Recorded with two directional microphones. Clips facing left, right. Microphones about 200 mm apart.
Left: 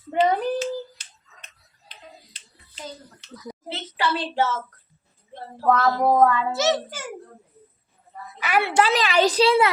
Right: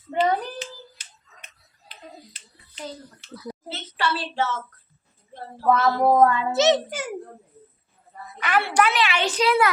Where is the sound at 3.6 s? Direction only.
20° left (ahead or behind).